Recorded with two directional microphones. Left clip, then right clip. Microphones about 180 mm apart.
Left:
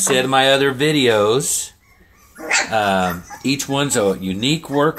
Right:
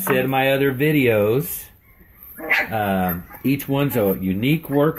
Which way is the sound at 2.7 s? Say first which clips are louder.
Left 5 dB; 5° right (ahead or behind).